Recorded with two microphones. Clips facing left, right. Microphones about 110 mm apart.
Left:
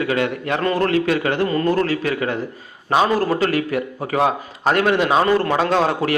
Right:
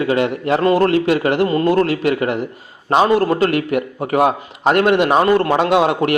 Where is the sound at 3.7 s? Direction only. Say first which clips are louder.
Right 4 dB; 55° right (ahead or behind).